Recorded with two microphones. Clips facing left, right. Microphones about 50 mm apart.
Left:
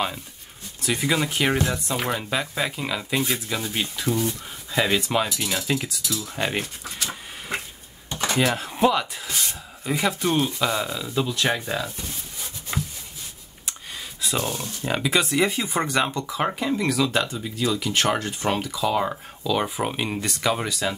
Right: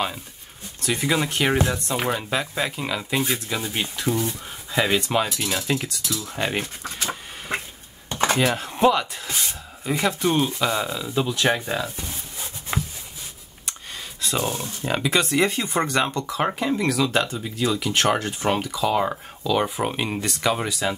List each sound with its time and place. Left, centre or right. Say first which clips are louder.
0.9 s speech: right 1 dB; centre
6.0 s speech: even; right
6.3 s speech: right 1 dB; centre
7.5 s a sound: right 2 dB; right
8.5 s speech: right 2 dB; centre
13.7 s a sound: even; centre
14.9 s speech: right 1 dB; centre
16.4 s speech: right 1 dB; centre